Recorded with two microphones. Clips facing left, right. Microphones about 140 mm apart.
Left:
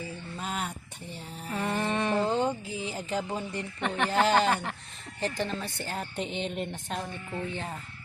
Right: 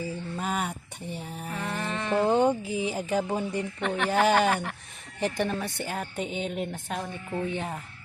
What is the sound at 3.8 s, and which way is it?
A woman's voice, centre (ahead or behind).